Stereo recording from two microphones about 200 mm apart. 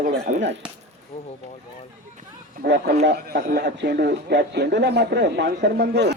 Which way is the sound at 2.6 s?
55° right (ahead or behind).